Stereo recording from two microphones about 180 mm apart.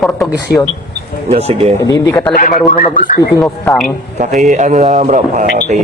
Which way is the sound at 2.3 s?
50° left (ahead or behind).